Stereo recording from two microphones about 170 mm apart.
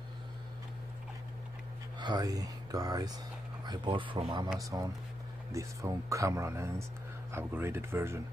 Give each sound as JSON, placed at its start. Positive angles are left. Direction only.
{"t": 2.0, "sound": "speech", "side_deg": -25}